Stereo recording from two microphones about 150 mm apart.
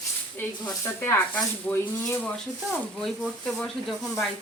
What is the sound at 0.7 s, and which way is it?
Speech, 15° left (ahead or behind).